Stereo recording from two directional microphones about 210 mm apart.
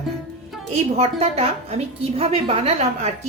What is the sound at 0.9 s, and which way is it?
A woman's voice, 30° right (ahead or behind).